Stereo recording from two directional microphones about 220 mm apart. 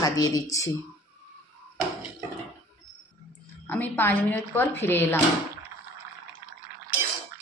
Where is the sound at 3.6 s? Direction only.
10° left (ahead or behind).